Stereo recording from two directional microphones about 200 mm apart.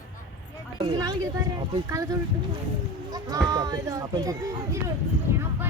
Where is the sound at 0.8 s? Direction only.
20° right (ahead or behind).